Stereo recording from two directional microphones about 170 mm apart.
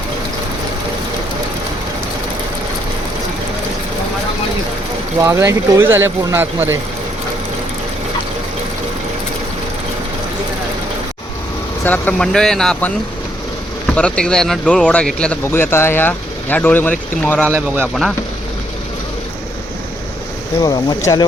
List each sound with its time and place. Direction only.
5.2 s speech: 15° right (ahead or behind)
11.9 s speech: 5° left (ahead or behind)
20.6 s speech: 20° left (ahead or behind)